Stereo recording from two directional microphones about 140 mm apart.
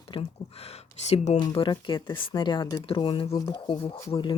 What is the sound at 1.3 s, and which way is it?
Speech, 35° left (ahead or behind).